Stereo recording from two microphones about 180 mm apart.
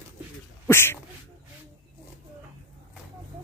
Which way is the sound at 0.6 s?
15° left (ahead or behind).